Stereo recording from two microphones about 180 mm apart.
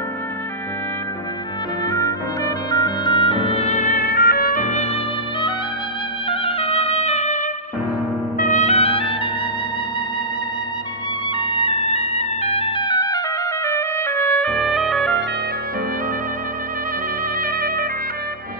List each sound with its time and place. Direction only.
1.9 s music: 20° left (ahead or behind); by 4.9 s 40° left (ahead or behind)
6.2 s music: 30° left (ahead or behind)
11.3 s music: 30° left (ahead or behind)
13.7 s trumpet: 15° left (ahead or behind)
17.4 s music: 55° right (ahead or behind)